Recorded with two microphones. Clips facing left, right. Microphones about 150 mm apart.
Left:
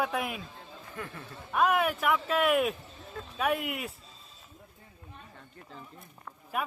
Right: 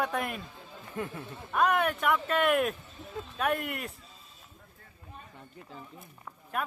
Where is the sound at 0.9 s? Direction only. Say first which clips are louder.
Right 5 dB; 25° right (ahead or behind).